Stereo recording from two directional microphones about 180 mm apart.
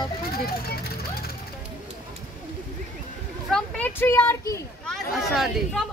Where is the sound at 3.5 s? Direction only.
10° left (ahead or behind).